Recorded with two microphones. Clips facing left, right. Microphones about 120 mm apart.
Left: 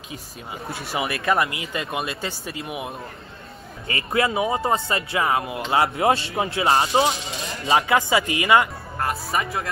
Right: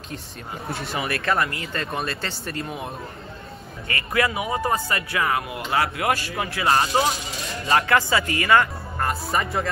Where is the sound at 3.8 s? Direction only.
25° left (ahead or behind).